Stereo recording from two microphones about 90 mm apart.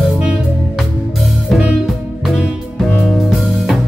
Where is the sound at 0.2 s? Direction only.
10° right (ahead or behind).